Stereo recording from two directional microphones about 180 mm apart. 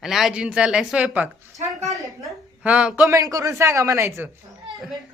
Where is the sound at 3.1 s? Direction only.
20° right (ahead or behind).